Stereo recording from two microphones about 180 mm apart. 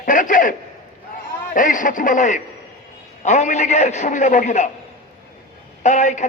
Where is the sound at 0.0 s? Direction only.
50° left (ahead or behind).